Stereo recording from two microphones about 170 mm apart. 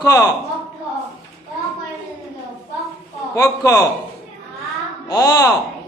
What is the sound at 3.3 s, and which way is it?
Speech, 20° left (ahead or behind).